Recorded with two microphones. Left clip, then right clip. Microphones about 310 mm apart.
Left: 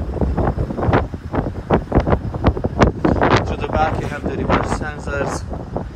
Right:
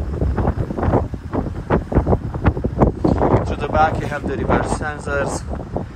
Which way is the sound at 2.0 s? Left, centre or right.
Right.